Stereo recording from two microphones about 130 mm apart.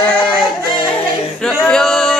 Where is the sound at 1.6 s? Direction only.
5° left (ahead or behind).